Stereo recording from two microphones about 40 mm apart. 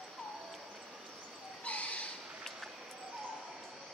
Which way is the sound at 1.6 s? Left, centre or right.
Left.